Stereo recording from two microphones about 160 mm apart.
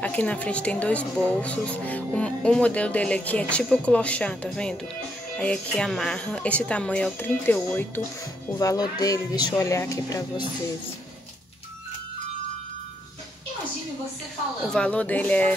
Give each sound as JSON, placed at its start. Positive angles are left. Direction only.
{"t": 0.0, "sound": "speech", "side_deg": 10}
{"t": 14.7, "sound": "speech", "side_deg": 5}